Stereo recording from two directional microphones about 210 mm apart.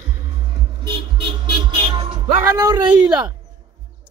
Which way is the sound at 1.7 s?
20° right (ahead or behind).